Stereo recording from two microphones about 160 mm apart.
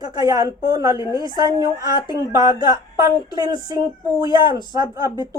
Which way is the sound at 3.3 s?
25° right (ahead or behind).